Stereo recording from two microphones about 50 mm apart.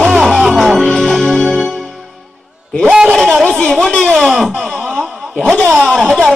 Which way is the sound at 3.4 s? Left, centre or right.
Centre.